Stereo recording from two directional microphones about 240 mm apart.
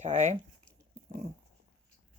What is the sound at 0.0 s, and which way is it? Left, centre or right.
Speech, right.